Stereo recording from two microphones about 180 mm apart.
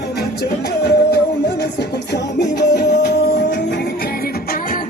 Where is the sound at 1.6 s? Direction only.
70° left (ahead or behind).